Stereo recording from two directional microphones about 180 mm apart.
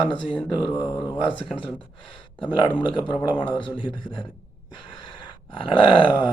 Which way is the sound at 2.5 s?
25° left (ahead or behind).